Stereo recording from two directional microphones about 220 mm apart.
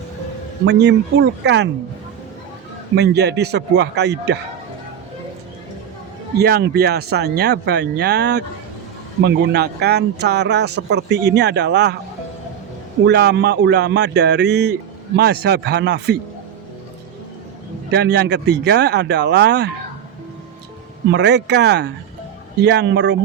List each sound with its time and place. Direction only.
0.6 s speech: 50° right (ahead or behind)
2.9 s speech: 50° right (ahead or behind)
6.4 s speech: 45° right (ahead or behind)
13.1 s speech: 50° right (ahead or behind)
17.9 s speech: 50° right (ahead or behind)
21.1 s speech: 50° right (ahead or behind)